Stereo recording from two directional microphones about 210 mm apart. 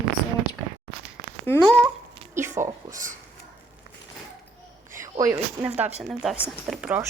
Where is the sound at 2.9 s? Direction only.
40° right (ahead or behind).